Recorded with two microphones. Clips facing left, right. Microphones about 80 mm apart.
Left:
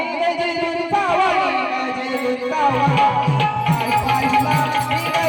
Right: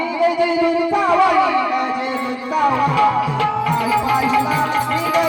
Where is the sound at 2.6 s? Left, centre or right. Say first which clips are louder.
Right 2 dB; right.